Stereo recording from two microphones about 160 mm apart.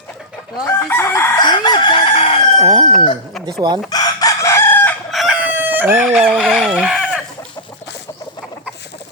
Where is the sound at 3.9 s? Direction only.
25° left (ahead or behind).